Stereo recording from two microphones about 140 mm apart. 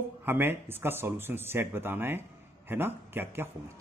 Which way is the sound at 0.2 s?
15° right (ahead or behind).